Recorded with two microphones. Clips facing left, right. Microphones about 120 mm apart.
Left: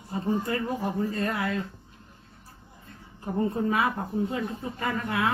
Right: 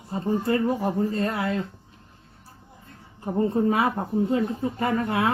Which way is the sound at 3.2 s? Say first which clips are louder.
Right 4 dB; 30° right (ahead or behind).